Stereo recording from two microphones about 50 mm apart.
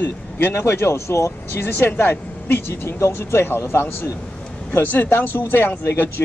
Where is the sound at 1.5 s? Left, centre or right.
Left.